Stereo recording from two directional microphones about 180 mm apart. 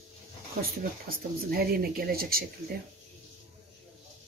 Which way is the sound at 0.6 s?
55° right (ahead or behind).